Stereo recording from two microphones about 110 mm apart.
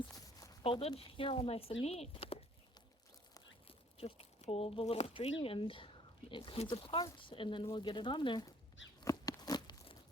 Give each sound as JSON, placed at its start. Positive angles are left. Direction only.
{"t": 0.6, "sound": "a woman's voice", "side_deg": 55}
{"t": 3.7, "sound": "speech", "side_deg": 60}
{"t": 9.1, "sound": "a sound", "side_deg": 30}
{"t": 9.4, "sound": "crunch", "side_deg": 40}